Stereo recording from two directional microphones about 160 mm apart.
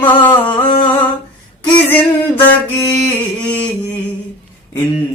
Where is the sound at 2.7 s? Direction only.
10° left (ahead or behind).